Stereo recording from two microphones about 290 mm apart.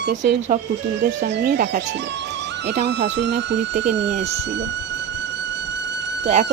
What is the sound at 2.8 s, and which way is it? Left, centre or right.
Speech, right.